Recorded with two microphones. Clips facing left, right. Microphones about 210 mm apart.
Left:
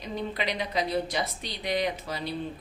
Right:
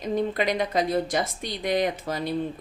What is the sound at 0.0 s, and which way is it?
A woman's voice, 50° right (ahead or behind).